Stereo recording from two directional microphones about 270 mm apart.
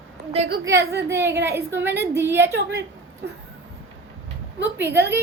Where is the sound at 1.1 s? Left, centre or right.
Centre.